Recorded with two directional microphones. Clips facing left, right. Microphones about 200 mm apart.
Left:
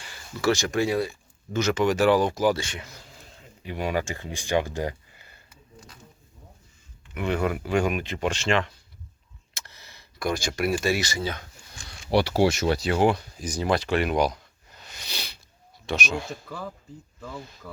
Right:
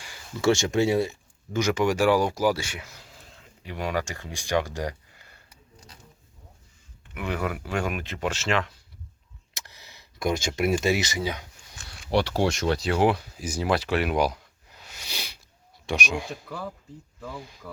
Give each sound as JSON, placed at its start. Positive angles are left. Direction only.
{"t": 0.4, "sound": "speech", "side_deg": -25}
{"t": 7.1, "sound": "speech", "side_deg": -5}
{"t": 9.6, "sound": "speech", "side_deg": -15}
{"t": 11.8, "sound": "a sound", "side_deg": -5}
{"t": 12.0, "sound": "speech", "side_deg": 5}